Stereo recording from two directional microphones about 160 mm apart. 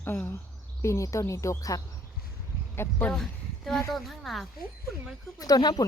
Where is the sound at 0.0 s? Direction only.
10° left (ahead or behind).